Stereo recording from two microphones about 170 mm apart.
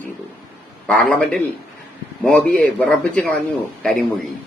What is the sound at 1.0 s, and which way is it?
A man's voice, 10° left (ahead or behind).